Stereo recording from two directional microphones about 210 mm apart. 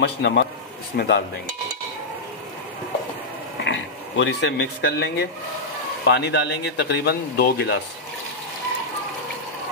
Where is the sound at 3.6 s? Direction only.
60° left (ahead or behind).